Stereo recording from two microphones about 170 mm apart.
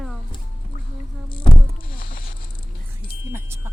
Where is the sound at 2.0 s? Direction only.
60° left (ahead or behind).